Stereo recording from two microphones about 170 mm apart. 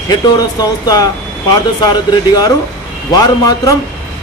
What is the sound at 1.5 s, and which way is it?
Speech, 25° left (ahead or behind).